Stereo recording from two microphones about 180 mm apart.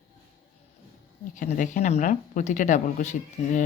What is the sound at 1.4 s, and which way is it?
Speech, 45° left (ahead or behind).